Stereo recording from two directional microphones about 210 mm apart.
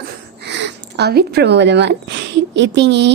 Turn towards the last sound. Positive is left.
turn(degrees=-55)  # may be behind; listen again after turning